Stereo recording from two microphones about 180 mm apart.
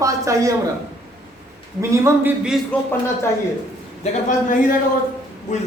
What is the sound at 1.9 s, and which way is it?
Speech, 15° right (ahead or behind).